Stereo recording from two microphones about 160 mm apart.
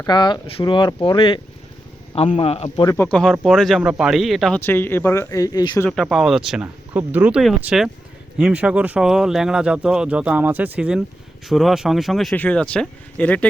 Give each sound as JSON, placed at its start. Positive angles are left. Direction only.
{"t": 0.1, "sound": "speech", "side_deg": 30}
{"t": 2.9, "sound": "speech", "side_deg": 10}
{"t": 4.6, "sound": "speech", "side_deg": 15}
{"t": 5.9, "sound": "speech", "side_deg": 0}